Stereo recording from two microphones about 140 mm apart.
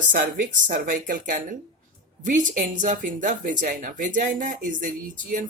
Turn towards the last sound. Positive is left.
turn(degrees=-70)  # may be behind; listen again after turning